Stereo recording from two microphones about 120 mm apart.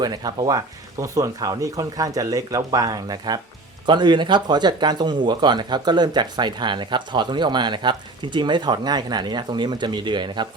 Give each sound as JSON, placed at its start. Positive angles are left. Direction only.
{"t": 0.0, "sound": "speech", "side_deg": -35}